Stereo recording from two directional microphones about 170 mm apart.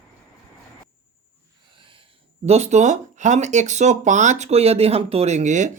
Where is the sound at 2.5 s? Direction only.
40° right (ahead or behind).